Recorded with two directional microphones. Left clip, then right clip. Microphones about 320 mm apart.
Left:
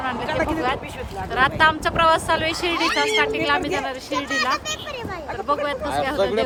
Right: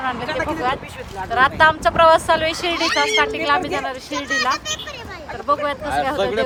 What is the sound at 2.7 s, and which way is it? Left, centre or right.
Speech, left.